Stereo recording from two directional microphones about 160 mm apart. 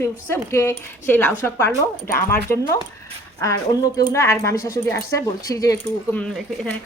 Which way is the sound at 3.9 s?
20° left (ahead or behind).